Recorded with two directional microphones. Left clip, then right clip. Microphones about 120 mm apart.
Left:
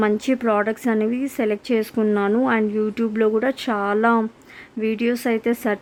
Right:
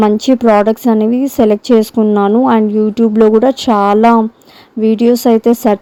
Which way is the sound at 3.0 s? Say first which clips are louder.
Right 13 dB; 45° right (ahead or behind).